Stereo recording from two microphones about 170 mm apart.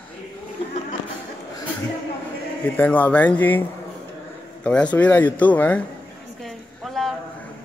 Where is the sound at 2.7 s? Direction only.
10° left (ahead or behind).